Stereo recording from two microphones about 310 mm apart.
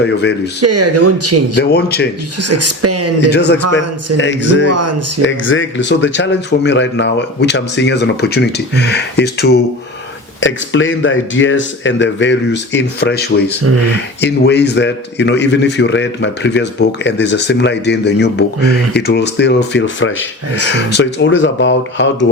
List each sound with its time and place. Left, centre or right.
0.0 s a man's voice: left
0.6 s speech: right
1.5 s a man's voice: left
2.4 s speech: right
3.2 s a man's voice: left
4.7 s speech: right
5.2 s a man's voice: left